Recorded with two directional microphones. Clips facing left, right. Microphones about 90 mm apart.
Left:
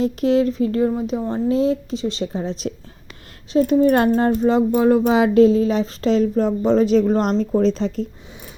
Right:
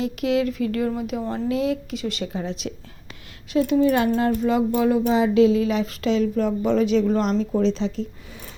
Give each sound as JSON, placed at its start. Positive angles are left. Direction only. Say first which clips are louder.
{"t": 0.0, "sound": "speech", "louder": "left 5 dB", "side_deg": 35}
{"t": 4.3, "sound": "speech", "louder": "left 4 dB", "side_deg": 30}
{"t": 5.0, "sound": "a sound", "louder": "left 3 dB", "side_deg": 70}
{"t": 5.3, "sound": "speech", "louder": "left 4 dB", "side_deg": 40}